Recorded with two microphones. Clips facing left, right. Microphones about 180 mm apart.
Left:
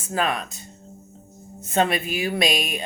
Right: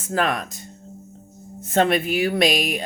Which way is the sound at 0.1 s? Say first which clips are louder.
Right 2 dB; 55° right (ahead or behind).